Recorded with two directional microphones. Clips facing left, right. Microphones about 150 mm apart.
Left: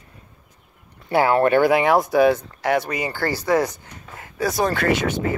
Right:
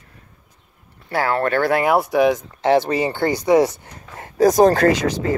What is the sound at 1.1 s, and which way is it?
Speech, 20° left (ahead or behind).